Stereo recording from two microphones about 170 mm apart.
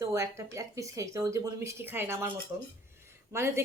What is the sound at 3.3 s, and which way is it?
Speech, 15° right (ahead or behind).